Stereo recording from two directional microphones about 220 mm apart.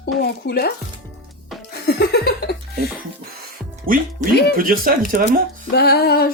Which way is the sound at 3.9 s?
40° right (ahead or behind).